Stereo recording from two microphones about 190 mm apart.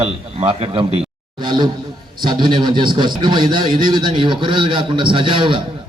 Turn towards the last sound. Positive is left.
turn(degrees=-25)  # may be behind; listen again after turning